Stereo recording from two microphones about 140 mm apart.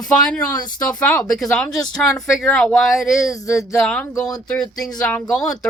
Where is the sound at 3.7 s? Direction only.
Centre (ahead or behind).